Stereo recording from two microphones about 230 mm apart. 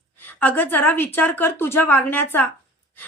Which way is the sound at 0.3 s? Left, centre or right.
Centre.